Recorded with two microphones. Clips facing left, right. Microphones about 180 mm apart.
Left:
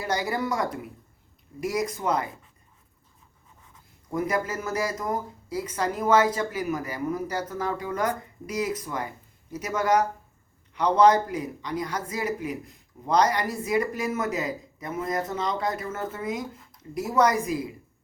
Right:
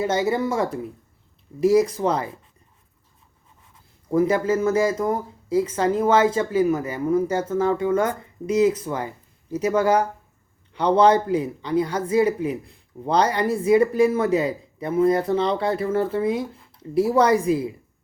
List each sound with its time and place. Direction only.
0.0 s speech: 25° right (ahead or behind)
4.1 s speech: 30° right (ahead or behind)